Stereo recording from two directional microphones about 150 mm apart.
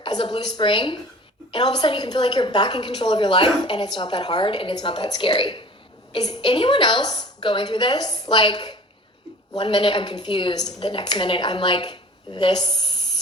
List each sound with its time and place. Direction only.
0.0 s a woman's voice: 30° left (ahead or behind)